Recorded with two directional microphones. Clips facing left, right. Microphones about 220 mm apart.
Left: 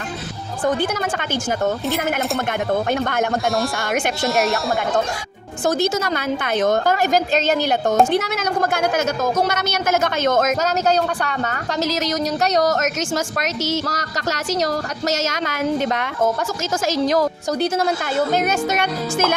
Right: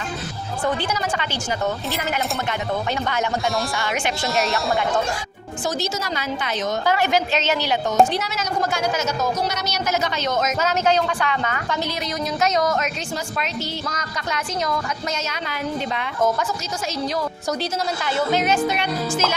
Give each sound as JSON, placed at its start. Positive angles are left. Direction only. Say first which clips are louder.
{"t": 0.8, "sound": "a woman's voice", "louder": "left 3 dB", "side_deg": 50}
{"t": 2.9, "sound": "a woman's voice", "louder": "left 4 dB", "side_deg": 50}
{"t": 4.3, "sound": "speech", "louder": "left 3 dB", "side_deg": 0}
{"t": 5.6, "sound": "a woman's voice", "louder": "left 6 dB", "side_deg": 55}
{"t": 13.6, "sound": "speech", "louder": "left 6 dB", "side_deg": 75}
{"t": 16.8, "sound": "a woman's voice", "louder": "left 7 dB", "side_deg": 90}
{"t": 17.6, "sound": "a woman's voice", "louder": "left 6 dB", "side_deg": 55}